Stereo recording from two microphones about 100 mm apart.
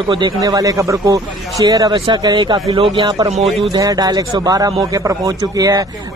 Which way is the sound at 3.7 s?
40° right (ahead or behind).